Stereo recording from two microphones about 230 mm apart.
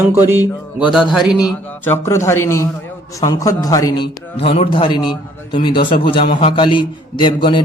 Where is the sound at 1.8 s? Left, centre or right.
Centre.